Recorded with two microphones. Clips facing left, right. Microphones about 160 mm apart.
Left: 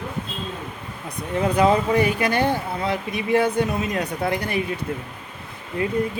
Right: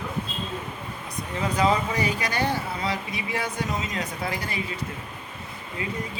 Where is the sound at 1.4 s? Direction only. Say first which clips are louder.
Left 5 dB; 55° left (ahead or behind).